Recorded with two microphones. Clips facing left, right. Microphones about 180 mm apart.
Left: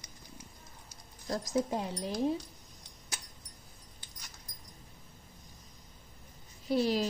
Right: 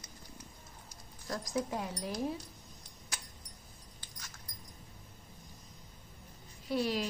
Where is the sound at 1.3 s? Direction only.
30° left (ahead or behind).